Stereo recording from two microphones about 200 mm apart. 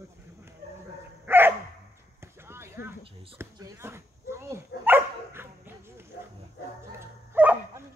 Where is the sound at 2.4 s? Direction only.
10° right (ahead or behind).